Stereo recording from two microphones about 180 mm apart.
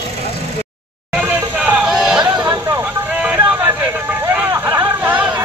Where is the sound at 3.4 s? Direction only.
10° right (ahead or behind).